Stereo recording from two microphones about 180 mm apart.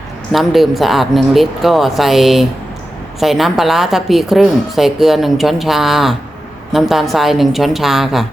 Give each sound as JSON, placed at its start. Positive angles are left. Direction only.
{"t": 0.3, "sound": "a woman's voice", "side_deg": 0}